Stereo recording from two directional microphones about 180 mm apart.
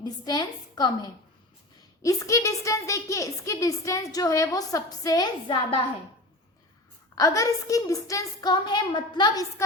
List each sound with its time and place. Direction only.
0.0 s a woman's voice: 20° left (ahead or behind)
7.2 s a woman's voice: 20° left (ahead or behind)